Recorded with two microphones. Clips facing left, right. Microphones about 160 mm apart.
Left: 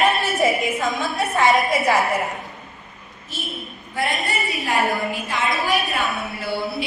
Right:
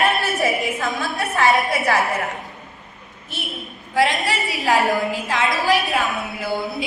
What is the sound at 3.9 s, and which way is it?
A woman's voice, 90° right.